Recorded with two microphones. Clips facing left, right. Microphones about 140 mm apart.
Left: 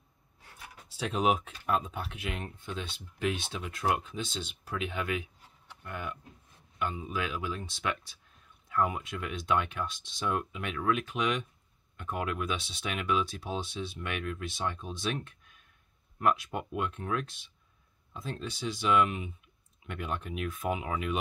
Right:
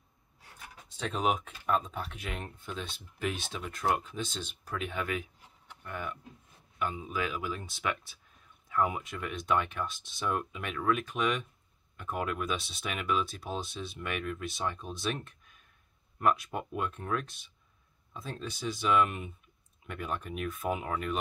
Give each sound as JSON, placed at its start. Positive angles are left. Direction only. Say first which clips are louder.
{"t": 0.8, "sound": "speech", "louder": "left 2 dB", "side_deg": 5}